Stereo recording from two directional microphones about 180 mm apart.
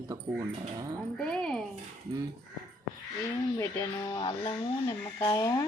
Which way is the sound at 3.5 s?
15° left (ahead or behind).